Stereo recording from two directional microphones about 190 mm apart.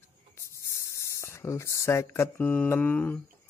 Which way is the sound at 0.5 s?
15° left (ahead or behind).